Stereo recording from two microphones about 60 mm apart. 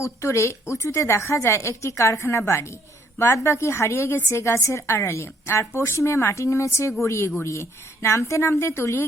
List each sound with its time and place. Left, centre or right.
0.0 s a woman's voice: left